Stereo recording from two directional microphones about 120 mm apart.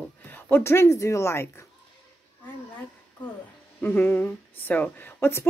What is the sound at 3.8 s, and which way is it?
A woman's voice, 15° left (ahead or behind).